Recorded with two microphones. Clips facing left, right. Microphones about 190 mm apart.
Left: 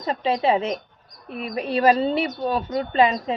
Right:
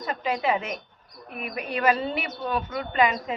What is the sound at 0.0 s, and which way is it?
A woman's voice, 30° left (ahead or behind).